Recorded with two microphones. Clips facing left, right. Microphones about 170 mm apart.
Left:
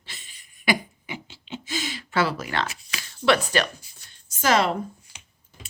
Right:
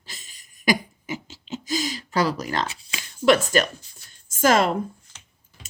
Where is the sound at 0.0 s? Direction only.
40° right (ahead or behind).